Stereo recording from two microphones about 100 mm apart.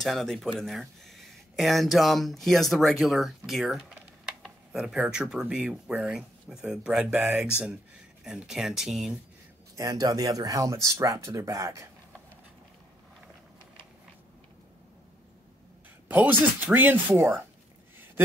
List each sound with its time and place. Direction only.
0.0 s speech: 5° left (ahead or behind)
7.2 s speech: 20° right (ahead or behind)
7.6 s speech: 5° right (ahead or behind)
9.8 s speech: 35° right (ahead or behind)
16.1 s speech: 15° right (ahead or behind)